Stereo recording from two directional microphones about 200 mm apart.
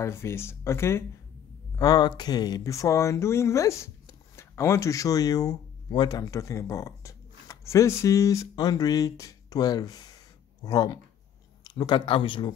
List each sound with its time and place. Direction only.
0.0 s speech: 15° left (ahead or behind)